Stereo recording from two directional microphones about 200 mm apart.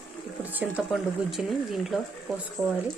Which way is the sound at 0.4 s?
10° right (ahead or behind).